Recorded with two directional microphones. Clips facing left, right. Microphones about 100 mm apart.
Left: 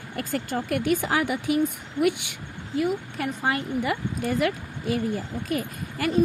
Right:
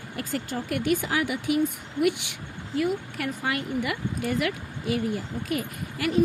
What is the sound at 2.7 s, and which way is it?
Speech, 20° left (ahead or behind).